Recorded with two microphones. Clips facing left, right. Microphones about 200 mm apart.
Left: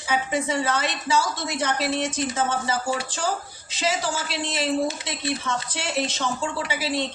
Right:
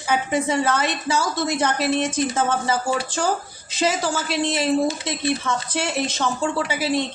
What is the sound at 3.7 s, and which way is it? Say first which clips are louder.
A woman's voice: right 4 dB; 50° right (ahead or behind).